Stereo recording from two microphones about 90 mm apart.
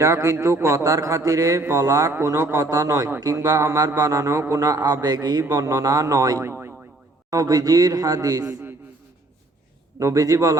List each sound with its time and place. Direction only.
0.0 s a man's voice: 30° right (ahead or behind)
7.3 s a man's voice: 40° right (ahead or behind)
10.0 s a man's voice: 40° right (ahead or behind)